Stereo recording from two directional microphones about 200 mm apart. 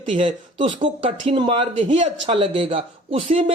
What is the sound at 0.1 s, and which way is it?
Speech, 25° right (ahead or behind).